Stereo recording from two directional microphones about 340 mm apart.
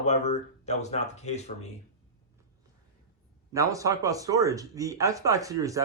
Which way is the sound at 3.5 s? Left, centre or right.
Centre.